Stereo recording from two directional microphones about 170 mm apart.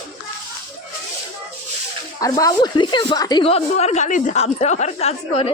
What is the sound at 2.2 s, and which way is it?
A woman's voice, 20° left (ahead or behind).